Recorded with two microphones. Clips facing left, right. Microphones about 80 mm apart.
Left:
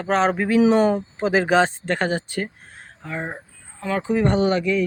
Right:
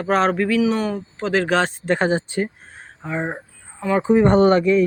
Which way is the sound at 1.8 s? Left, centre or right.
Centre.